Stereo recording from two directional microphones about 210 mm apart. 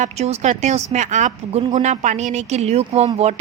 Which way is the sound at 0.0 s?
30° right (ahead or behind).